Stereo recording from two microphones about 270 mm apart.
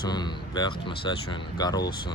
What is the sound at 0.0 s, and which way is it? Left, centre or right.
Speech, centre.